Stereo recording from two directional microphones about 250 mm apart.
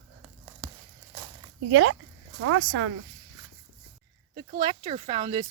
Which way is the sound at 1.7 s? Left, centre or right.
Right.